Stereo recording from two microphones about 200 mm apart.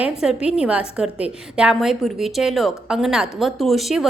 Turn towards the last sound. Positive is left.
turn(degrees=0)  # may be behind; listen again after turning